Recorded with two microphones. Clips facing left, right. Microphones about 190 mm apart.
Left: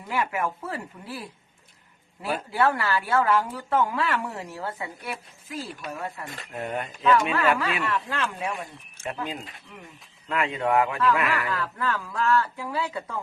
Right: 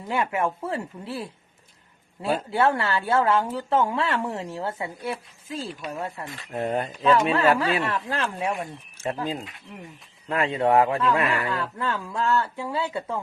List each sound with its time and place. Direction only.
0.1 s speech: 25° right (ahead or behind)